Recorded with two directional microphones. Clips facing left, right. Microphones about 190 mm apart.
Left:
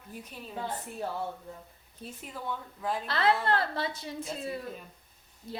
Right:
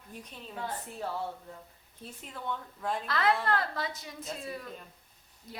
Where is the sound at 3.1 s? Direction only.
30° left (ahead or behind).